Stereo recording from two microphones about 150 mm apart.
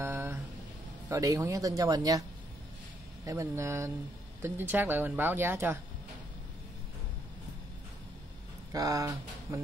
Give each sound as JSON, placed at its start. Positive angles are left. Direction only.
{"t": 0.0, "sound": "a sound", "side_deg": -15}
{"t": 1.0, "sound": "speech", "side_deg": -20}
{"t": 3.3, "sound": "speech", "side_deg": -20}
{"t": 8.7, "sound": "speech", "side_deg": -25}